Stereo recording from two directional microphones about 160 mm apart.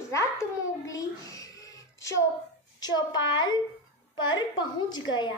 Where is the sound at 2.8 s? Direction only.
25° left (ahead or behind).